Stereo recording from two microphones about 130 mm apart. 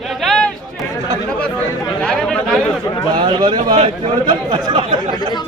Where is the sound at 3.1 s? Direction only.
35° right (ahead or behind).